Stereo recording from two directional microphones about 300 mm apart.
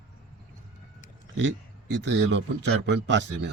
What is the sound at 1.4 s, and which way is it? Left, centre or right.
Speech, right.